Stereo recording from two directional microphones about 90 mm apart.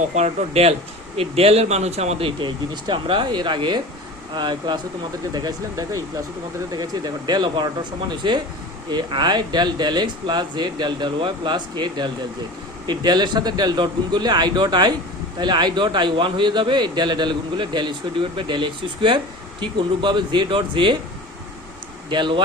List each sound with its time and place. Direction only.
0.7 s speech: 90° right
2.8 s a man's voice: 65° right (ahead or behind); by 5.5 s 50° right (ahead or behind)
5.7 s a man's voice: 40° right (ahead or behind); by 20.9 s 65° right (ahead or behind)
22.1 s a man's voice: 65° right (ahead or behind)